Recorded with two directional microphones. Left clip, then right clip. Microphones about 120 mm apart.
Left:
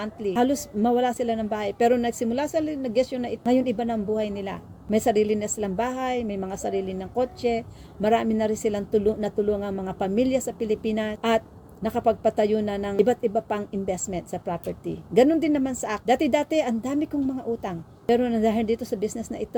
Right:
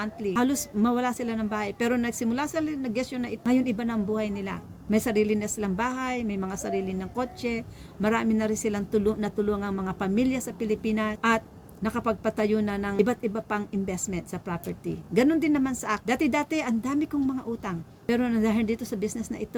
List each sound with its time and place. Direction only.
0.0 s a woman's voice: 30° right (ahead or behind)